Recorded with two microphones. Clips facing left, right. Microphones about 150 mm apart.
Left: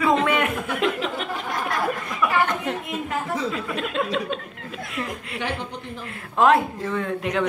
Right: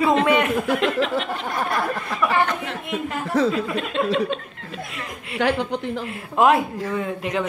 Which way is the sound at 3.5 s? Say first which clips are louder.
Right 3 dB; centre (ahead or behind).